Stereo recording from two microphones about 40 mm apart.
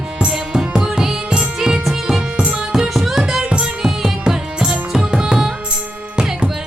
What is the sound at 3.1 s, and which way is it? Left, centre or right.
Music, centre.